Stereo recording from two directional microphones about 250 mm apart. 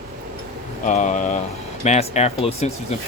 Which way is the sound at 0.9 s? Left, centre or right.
Left.